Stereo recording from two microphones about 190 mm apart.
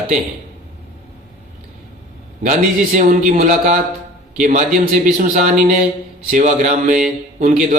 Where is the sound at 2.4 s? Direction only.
40° right (ahead or behind).